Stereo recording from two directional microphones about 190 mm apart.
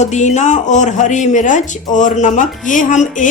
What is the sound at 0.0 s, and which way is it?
Speech, 40° left (ahead or behind).